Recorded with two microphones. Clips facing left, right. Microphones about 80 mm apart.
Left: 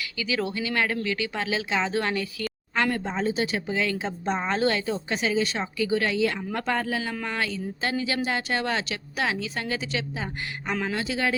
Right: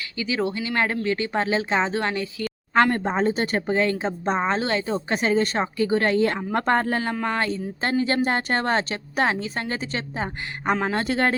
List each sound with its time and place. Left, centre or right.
0.2 s speech: right
2.7 s a woman's voice: right
5.0 s a woman's voice: right
7.3 s a woman's voice: right
11.0 s a woman's voice: right